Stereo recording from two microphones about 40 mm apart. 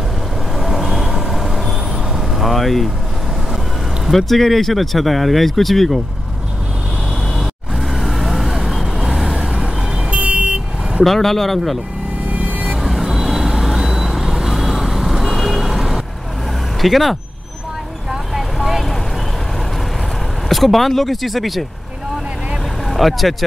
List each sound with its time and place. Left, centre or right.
0.6 s vehicle: centre
4.0 s speech: centre
7.3 s vehicle: centre
10.1 s vehicle: right
11.1 s speech: centre
12.3 s vehicle: right
12.8 s vehicle: centre
16.8 s speech: centre
18.6 s vehicle: centre
20.4 s speech: centre
22.8 s speech: centre